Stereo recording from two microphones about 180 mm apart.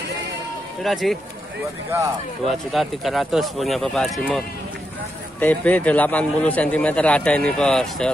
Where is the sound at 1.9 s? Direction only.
10° right (ahead or behind).